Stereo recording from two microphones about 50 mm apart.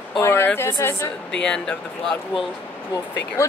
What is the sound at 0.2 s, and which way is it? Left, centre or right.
Speech, left.